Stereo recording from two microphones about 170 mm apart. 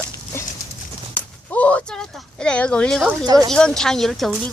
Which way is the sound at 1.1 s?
10° left (ahead or behind).